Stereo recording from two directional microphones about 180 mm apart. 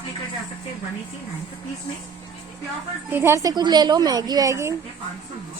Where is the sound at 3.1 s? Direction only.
10° right (ahead or behind).